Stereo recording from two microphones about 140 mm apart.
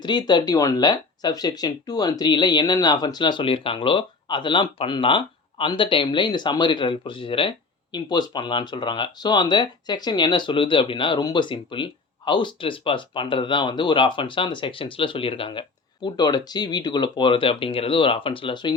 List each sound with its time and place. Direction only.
0.0 s speech: 30° left (ahead or behind)